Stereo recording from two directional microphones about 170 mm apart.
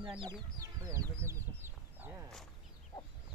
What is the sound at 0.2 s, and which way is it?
Speech, 25° right (ahead or behind).